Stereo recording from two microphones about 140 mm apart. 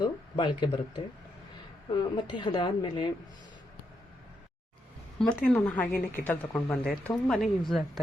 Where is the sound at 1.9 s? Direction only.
30° left (ahead or behind).